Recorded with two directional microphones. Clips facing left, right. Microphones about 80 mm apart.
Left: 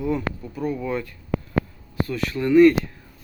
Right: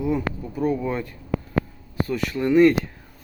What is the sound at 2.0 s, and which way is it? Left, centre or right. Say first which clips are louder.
Speech: right 1 dB; right.